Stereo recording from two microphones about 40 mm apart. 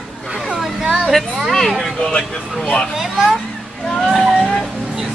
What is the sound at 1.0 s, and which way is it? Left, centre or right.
Speech, centre.